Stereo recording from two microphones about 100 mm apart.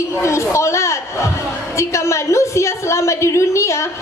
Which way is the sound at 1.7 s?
30° left (ahead or behind).